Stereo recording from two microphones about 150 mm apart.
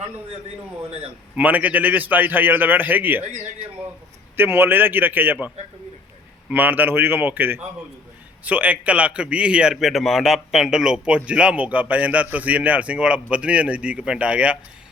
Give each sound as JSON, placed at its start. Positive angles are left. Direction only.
{"t": 1.4, "sound": "a man's voice", "side_deg": -10}
{"t": 4.4, "sound": "a man's voice", "side_deg": -15}
{"t": 6.5, "sound": "a man's voice", "side_deg": -10}